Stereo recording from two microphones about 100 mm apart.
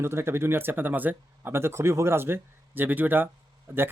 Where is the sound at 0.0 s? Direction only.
25° right (ahead or behind).